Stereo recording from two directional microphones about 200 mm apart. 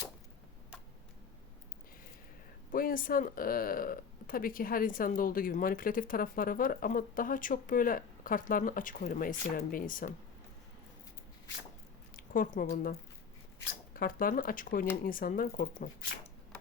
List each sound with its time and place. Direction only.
2.7 s speech: 45° left (ahead or behind)
12.1 s a sound: 45° left (ahead or behind)
12.7 s speech: 45° left (ahead or behind)